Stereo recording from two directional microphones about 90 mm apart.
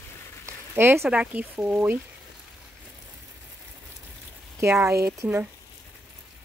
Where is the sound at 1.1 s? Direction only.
15° right (ahead or behind).